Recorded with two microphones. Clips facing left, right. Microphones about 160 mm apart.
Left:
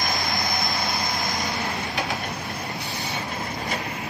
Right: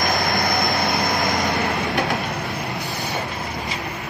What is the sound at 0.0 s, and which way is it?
Vehicle, 50° right (ahead or behind).